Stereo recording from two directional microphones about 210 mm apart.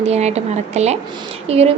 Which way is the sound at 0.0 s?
30° right (ahead or behind).